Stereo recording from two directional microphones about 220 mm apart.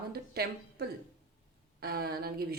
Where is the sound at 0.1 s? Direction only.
45° right (ahead or behind).